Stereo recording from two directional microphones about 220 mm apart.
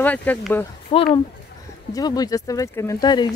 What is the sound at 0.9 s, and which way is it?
Speech, 25° left (ahead or behind).